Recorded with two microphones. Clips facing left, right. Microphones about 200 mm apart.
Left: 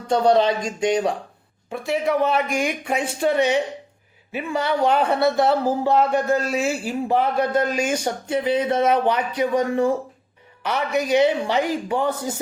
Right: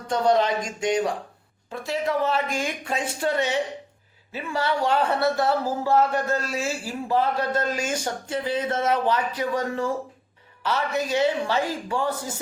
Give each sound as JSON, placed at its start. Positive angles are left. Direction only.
{"t": 0.1, "sound": "speech", "side_deg": 25}